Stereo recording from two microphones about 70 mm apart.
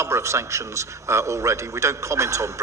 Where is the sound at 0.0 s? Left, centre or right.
Right.